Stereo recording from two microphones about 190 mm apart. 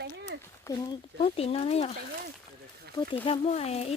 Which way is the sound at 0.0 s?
60° right (ahead or behind).